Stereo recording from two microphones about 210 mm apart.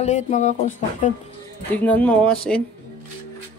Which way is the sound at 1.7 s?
5° left (ahead or behind).